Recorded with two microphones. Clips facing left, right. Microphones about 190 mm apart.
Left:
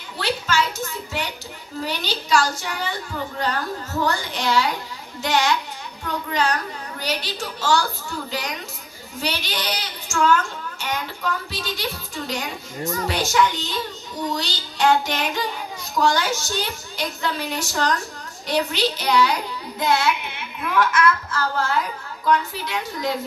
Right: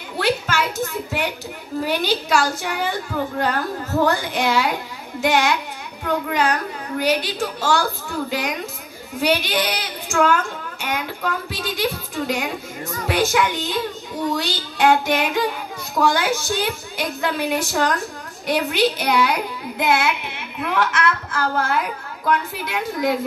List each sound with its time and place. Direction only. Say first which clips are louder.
0.2 s a child's voice: right 2 dB; 55° right (ahead or behind)